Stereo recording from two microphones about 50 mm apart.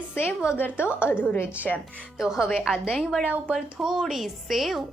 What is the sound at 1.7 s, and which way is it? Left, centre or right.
Speech, left.